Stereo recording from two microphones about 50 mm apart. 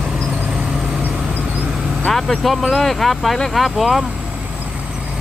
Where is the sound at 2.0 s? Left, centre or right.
Centre.